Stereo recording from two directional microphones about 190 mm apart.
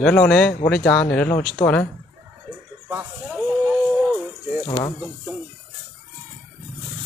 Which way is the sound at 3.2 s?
Centre (ahead or behind).